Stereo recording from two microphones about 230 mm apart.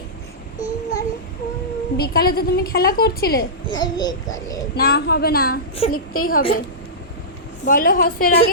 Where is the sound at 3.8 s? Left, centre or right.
Centre.